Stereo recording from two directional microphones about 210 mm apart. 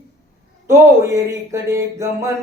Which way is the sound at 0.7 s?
15° right (ahead or behind).